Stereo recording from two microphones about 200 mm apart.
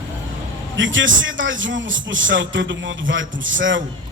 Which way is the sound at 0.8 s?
70° right (ahead or behind).